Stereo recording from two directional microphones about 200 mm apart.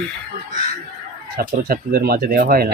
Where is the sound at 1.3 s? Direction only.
50° right (ahead or behind).